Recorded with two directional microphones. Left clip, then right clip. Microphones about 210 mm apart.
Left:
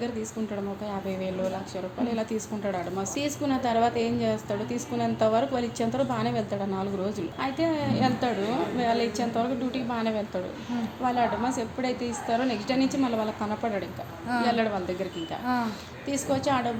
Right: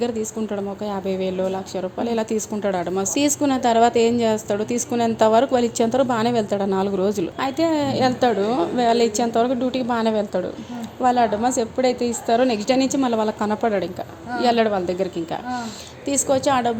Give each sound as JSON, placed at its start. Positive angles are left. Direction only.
{"t": 0.9, "sound": "a woman's voice", "side_deg": -50}